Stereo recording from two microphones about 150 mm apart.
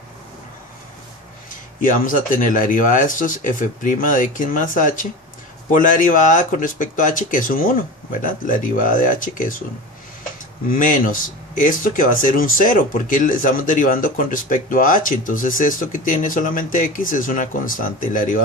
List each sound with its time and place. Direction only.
1.8 s speech: 65° left (ahead or behind)
10.7 s speech: 65° left (ahead or behind)